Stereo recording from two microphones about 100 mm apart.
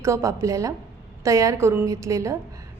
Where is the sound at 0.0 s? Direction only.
30° right (ahead or behind).